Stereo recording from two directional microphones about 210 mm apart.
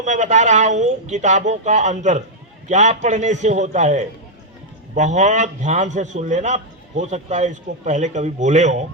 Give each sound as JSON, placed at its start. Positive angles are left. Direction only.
{"t": 0.0, "sound": "a man's voice", "side_deg": -35}